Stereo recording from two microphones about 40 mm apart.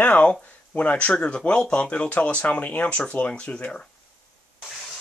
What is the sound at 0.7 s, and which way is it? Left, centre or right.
Speech, left.